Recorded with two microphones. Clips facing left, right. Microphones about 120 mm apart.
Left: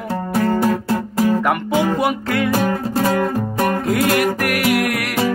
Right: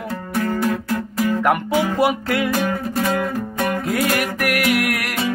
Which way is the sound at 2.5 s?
35° left (ahead or behind).